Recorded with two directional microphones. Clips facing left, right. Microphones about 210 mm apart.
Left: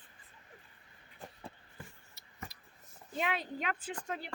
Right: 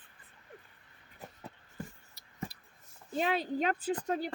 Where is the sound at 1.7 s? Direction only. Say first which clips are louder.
Right 8 dB; 35° right (ahead or behind).